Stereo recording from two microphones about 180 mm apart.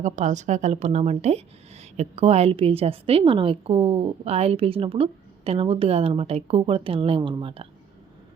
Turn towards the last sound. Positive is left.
turn(degrees=-30)  # may be behind; listen again after turning